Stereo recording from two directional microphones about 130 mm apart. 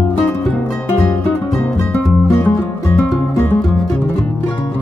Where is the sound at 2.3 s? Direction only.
25° left (ahead or behind).